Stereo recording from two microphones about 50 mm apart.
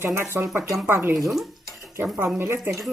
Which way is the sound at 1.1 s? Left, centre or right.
Centre.